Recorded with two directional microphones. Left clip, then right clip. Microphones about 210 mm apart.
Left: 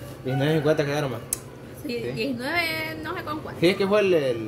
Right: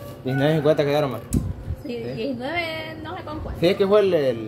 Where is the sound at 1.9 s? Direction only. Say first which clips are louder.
Even; 55° left (ahead or behind).